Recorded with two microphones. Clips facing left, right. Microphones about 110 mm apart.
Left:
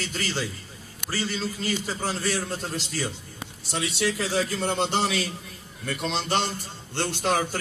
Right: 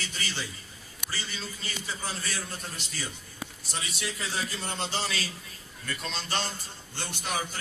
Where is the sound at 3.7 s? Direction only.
90° left.